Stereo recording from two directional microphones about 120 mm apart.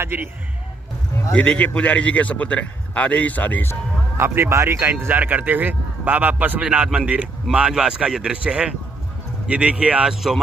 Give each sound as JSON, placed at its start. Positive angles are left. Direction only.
{"t": 0.0, "sound": "a man's voice", "side_deg": -15}
{"t": 1.3, "sound": "a man's voice", "side_deg": 10}
{"t": 4.2, "sound": "a man's voice", "side_deg": -25}